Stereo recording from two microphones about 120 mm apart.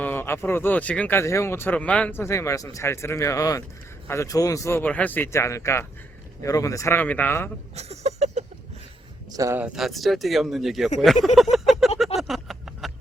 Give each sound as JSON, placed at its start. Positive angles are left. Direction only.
{"t": 0.0, "sound": "speech", "side_deg": 20}
{"t": 1.2, "sound": "speech", "side_deg": 25}
{"t": 4.8, "sound": "speech", "side_deg": 10}
{"t": 7.8, "sound": "a sound", "side_deg": -65}
{"t": 9.3, "sound": "speech", "side_deg": -30}
{"t": 9.6, "sound": "speech", "side_deg": -5}
{"t": 11.5, "sound": "a sound", "side_deg": 0}